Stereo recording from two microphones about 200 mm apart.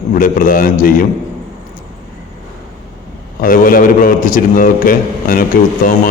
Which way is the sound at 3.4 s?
45° left (ahead or behind).